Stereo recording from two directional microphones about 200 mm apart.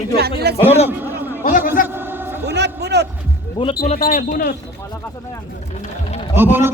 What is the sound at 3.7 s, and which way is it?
Speech, 40° left (ahead or behind).